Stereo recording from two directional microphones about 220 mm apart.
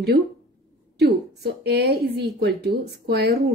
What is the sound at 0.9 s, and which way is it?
Speech, 45° right (ahead or behind).